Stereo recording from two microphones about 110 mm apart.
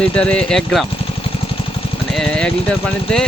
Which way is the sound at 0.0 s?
10° left (ahead or behind).